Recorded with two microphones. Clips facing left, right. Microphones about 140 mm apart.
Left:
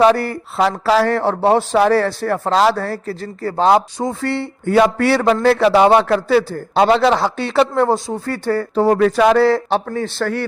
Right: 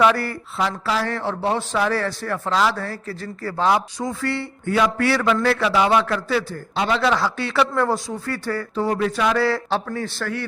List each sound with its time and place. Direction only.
0.6 s speech: 80° left
1.0 s a man's voice: 40° left (ahead or behind)
5.6 s a man's voice: 40° left (ahead or behind)
9.0 s speech: 55° left (ahead or behind)
9.4 s speech: 20° left (ahead or behind)